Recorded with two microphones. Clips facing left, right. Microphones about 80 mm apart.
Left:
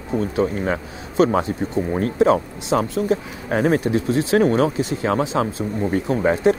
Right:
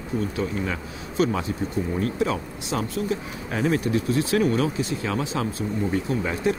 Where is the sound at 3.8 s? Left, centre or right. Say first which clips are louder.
Left 3 dB; left.